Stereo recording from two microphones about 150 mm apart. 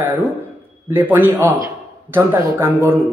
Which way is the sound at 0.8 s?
15° right (ahead or behind).